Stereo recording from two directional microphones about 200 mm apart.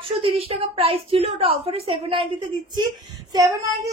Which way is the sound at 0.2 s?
30° right (ahead or behind).